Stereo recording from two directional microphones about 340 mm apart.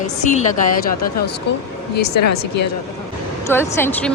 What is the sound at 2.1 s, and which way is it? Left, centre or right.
Speech, left.